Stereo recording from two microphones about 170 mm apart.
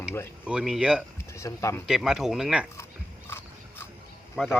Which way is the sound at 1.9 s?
Centre (ahead or behind).